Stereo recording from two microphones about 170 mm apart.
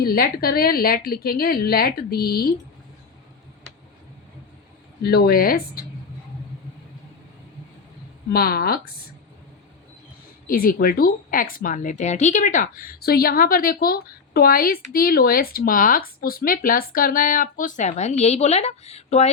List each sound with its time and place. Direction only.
0.0 s a woman's voice: 60° left (ahead or behind)
5.0 s a woman's voice: 65° left (ahead or behind)
8.3 s a woman's voice: 65° left (ahead or behind)
10.4 s a woman's voice: 55° left (ahead or behind); by 19.3 s 40° left (ahead or behind)